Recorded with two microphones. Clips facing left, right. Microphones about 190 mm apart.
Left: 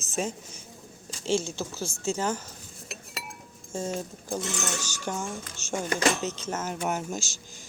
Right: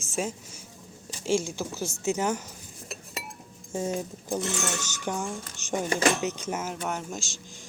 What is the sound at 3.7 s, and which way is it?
Speech, 15° right (ahead or behind).